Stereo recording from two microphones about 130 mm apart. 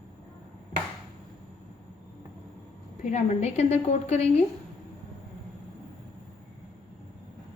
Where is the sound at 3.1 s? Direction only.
60° left (ahead or behind).